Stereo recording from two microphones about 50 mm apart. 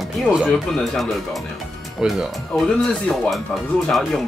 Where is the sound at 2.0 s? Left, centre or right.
Centre.